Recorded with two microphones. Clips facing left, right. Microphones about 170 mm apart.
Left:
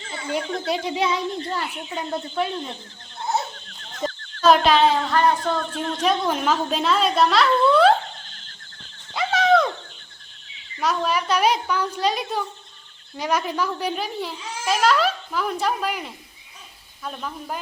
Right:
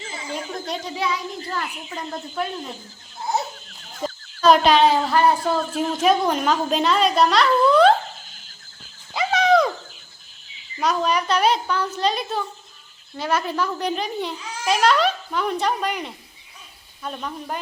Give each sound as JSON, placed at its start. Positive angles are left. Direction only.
{"t": 0.0, "sound": "speech", "side_deg": -5}
{"t": 0.9, "sound": "speech", "side_deg": 20}
{"t": 1.7, "sound": "a child's voice", "side_deg": 0}
{"t": 9.1, "sound": "a sound", "side_deg": 0}
{"t": 10.5, "sound": "a child's voice", "side_deg": 0}